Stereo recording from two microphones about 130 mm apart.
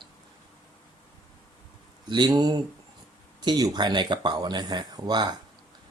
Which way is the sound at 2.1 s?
35° right (ahead or behind).